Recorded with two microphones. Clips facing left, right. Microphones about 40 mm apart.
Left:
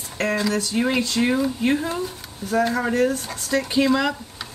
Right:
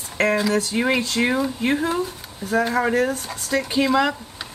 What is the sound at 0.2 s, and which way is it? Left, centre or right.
Speech, centre.